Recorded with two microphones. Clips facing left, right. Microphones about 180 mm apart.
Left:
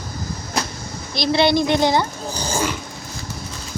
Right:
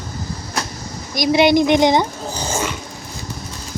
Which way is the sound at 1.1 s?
15° right (ahead or behind).